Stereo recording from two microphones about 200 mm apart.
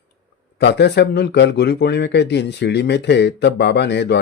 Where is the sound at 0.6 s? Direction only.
55° left (ahead or behind).